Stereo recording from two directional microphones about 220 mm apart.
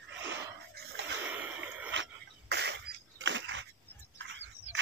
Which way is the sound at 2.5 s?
50° right (ahead or behind).